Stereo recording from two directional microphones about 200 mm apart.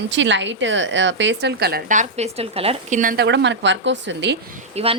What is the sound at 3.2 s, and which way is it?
A woman's voice, 60° right (ahead or behind).